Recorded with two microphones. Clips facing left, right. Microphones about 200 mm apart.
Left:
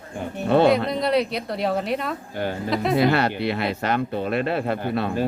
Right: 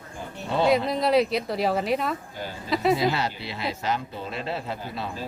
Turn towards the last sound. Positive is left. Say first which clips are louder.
# left 10 dB
turn(degrees=60)  # may be behind; listen again after turning